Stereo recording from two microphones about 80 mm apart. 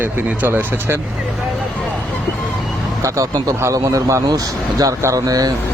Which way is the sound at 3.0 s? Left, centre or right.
Right.